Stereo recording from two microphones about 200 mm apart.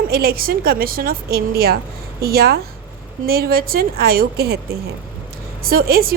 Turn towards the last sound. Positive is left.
turn(degrees=-50)  # may be behind; listen again after turning